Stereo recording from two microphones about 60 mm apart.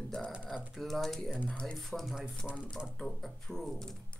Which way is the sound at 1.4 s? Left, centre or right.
Centre.